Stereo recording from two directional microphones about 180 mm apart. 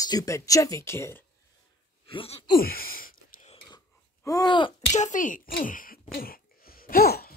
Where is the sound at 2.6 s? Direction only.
55° left (ahead or behind).